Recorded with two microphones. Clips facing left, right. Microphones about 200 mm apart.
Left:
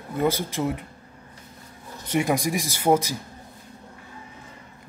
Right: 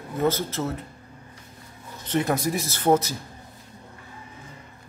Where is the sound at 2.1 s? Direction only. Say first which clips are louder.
Left 1 dB; 10° left (ahead or behind).